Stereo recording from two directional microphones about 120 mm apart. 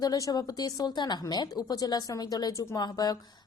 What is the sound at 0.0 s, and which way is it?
A woman's voice, 30° left (ahead or behind).